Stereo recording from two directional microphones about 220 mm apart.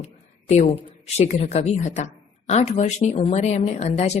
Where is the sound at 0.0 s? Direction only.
30° left (ahead or behind).